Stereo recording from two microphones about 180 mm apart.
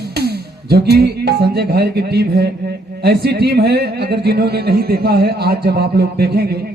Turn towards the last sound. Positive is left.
turn(degrees=-60)  # may be behind; listen again after turning